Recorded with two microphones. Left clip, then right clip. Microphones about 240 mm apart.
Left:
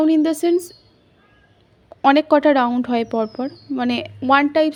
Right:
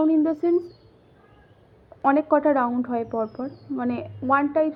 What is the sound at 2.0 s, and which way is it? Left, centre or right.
Speech, left.